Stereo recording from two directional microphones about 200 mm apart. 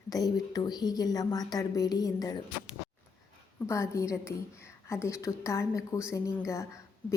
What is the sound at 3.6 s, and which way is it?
A woman's voice, 15° left (ahead or behind).